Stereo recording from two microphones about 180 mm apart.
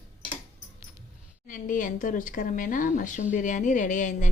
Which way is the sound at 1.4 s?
45° left (ahead or behind).